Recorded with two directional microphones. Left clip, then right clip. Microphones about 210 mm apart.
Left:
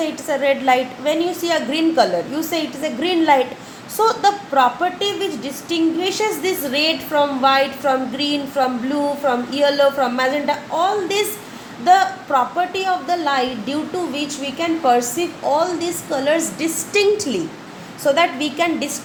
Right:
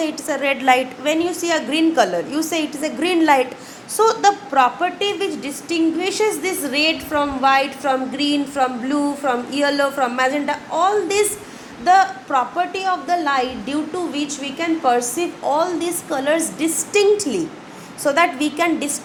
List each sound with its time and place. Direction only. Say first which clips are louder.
0.0 s a woman's voice: left 2 dB; 25° right (ahead or behind)